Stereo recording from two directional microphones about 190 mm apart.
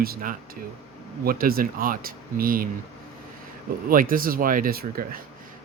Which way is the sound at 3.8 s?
45° right (ahead or behind).